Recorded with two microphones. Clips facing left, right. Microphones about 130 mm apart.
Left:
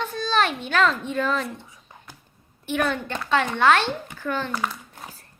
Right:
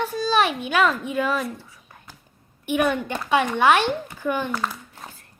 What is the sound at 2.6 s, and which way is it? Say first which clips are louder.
A woman's voice: right 3 dB; 15° right (ahead or behind).